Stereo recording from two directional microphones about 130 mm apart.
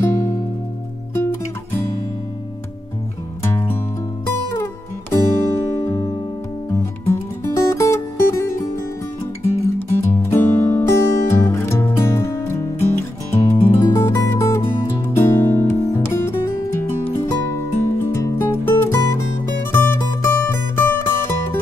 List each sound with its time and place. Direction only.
0.0 s music: 20° left (ahead or behind)
5.5 s music: 20° left (ahead or behind)
9.8 s music: 15° left (ahead or behind)